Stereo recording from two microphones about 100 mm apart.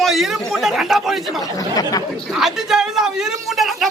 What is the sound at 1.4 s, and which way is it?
Speech, 40° left (ahead or behind).